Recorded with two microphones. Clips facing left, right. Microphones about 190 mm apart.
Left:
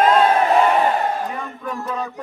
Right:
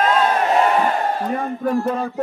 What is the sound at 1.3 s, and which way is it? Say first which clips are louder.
Speech: right 8 dB; 45° right (ahead or behind).